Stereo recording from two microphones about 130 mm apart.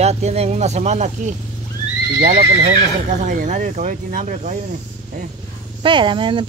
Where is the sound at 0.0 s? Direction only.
55° right (ahead or behind).